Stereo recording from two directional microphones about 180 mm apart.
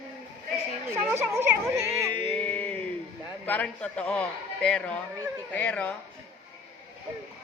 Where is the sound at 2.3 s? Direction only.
5° left (ahead or behind).